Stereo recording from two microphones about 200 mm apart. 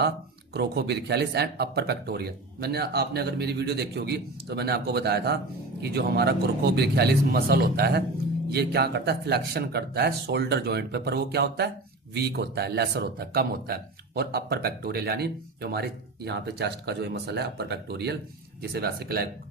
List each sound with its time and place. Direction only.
0.5 s speech: 55° right (ahead or behind)